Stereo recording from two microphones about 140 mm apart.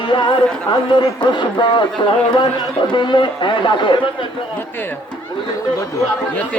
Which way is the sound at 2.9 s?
35° left (ahead or behind).